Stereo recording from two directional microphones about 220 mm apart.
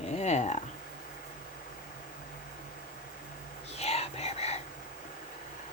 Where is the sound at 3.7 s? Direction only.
30° left (ahead or behind).